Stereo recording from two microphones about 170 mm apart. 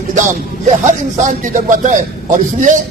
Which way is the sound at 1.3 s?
50° right (ahead or behind).